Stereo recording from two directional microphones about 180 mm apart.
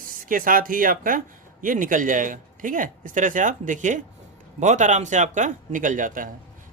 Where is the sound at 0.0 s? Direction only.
50° right (ahead or behind).